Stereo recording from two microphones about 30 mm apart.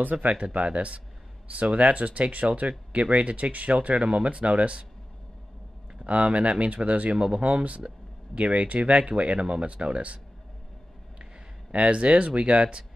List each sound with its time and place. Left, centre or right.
0.1 s speech: right
2.0 s speech: right
2.3 s speech: right
6.0 s speech: right
7.2 s speech: right
7.4 s speech: right
11.7 s speech: right